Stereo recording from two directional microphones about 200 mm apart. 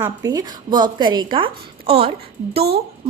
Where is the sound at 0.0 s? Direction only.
20° right (ahead or behind).